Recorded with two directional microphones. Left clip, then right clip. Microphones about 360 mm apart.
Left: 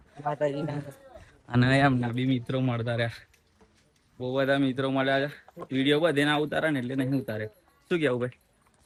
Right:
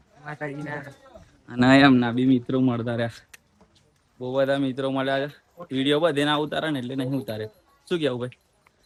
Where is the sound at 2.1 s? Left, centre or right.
Centre.